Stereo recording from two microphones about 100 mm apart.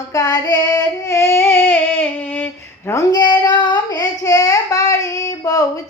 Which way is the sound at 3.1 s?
45° left (ahead or behind).